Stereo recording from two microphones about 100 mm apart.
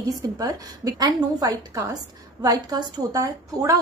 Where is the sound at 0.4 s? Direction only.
40° right (ahead or behind).